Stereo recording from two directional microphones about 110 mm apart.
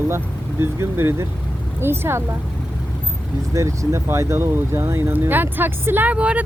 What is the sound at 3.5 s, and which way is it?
Speech, 25° right (ahead or behind).